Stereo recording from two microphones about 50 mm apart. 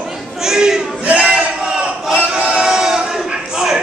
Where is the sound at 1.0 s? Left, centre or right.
Right.